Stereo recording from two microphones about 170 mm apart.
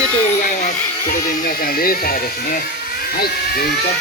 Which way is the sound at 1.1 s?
60° left (ahead or behind).